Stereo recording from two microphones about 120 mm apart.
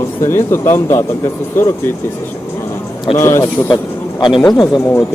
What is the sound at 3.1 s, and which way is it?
Speech, 20° left (ahead or behind).